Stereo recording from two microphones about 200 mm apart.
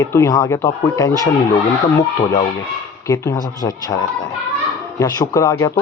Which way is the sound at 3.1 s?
20° left (ahead or behind).